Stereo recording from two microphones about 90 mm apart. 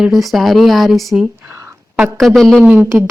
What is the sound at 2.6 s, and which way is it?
Speech, 15° right (ahead or behind).